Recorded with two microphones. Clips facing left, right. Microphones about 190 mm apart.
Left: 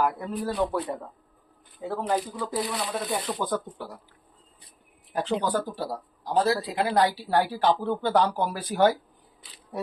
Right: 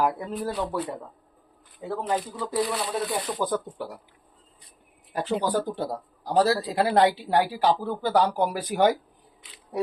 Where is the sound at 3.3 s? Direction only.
10° right (ahead or behind).